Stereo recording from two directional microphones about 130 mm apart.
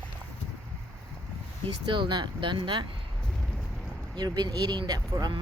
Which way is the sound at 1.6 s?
40° right (ahead or behind).